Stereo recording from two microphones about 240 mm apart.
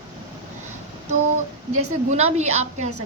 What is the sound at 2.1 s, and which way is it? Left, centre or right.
Speech, right.